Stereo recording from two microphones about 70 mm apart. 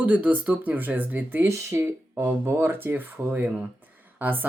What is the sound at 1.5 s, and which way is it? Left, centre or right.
Speech, right.